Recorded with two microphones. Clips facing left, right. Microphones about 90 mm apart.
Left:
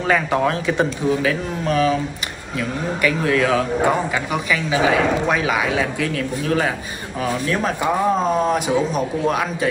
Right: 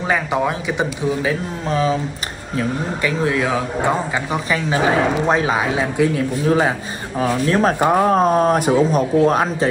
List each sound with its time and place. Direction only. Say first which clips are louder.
0.0 s a man's voice: left 1 dB; 15° right (ahead or behind)
7.2 s speech: right 4 dB; 35° right (ahead or behind)
7.8 s speech: right 3 dB; 55° right (ahead or behind); by 9.7 s 35° right (ahead or behind)